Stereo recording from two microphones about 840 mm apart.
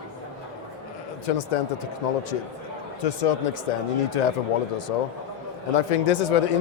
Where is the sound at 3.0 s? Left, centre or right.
Left.